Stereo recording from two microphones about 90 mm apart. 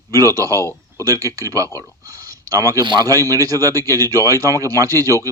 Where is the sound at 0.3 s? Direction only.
40° right (ahead or behind).